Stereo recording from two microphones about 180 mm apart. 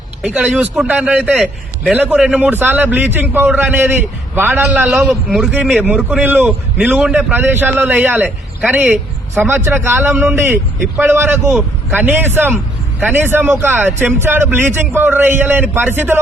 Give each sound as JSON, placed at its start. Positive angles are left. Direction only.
{"t": 0.2, "sound": "a man's voice", "side_deg": -5}